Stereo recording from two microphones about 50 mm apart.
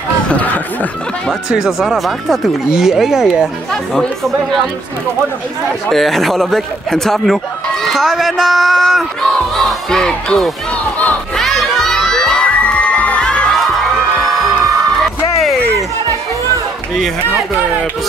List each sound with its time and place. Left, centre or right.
0.3 s speech: left
1.5 s a man's voice: centre
5.9 s a man's voice: centre
11.3 s children shouting: centre
12.4 s music: left
13.7 s music: centre